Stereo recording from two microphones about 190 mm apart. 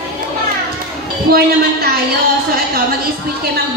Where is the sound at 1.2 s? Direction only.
55° right (ahead or behind).